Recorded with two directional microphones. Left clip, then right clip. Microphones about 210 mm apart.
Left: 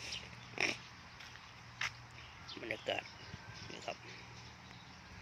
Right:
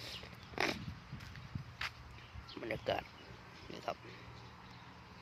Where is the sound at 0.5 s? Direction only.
20° right (ahead or behind).